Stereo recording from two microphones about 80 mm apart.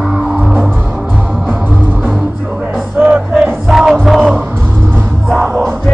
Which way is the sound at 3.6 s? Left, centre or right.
Centre.